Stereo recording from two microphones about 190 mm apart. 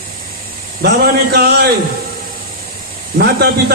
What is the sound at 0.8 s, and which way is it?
Speech, 55° right (ahead or behind).